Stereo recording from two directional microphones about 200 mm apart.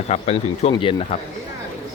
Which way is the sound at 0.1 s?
30° left (ahead or behind).